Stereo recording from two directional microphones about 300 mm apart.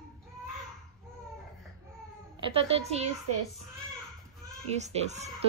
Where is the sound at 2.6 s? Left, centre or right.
Centre.